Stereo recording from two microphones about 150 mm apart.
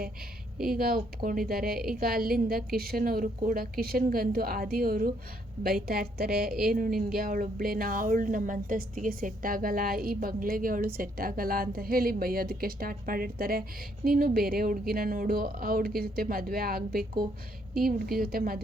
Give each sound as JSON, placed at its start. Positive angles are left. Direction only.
{"t": 0.8, "sound": "speech", "side_deg": -80}
{"t": 6.7, "sound": "speech", "side_deg": -70}